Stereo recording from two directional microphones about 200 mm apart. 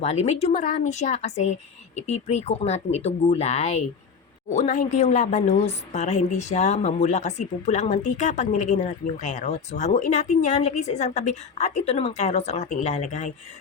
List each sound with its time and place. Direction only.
0.0 s speech: 35° left (ahead or behind)